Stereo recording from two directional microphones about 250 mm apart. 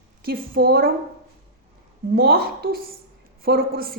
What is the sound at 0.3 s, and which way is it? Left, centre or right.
Speech, right.